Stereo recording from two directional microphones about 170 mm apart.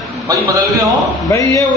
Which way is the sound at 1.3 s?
20° left (ahead or behind).